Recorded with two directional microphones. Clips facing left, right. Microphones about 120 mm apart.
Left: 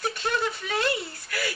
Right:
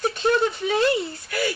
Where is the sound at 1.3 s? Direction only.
30° right (ahead or behind).